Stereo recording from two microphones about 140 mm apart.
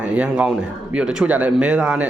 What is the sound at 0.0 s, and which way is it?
A man's voice, 10° right (ahead or behind).